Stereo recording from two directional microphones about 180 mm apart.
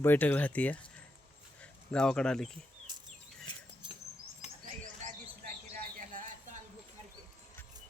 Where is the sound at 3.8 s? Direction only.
30° right (ahead or behind).